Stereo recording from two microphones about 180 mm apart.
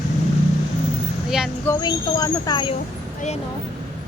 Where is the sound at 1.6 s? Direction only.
20° left (ahead or behind).